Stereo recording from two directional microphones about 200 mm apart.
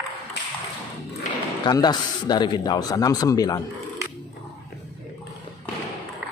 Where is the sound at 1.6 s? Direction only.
20° left (ahead or behind).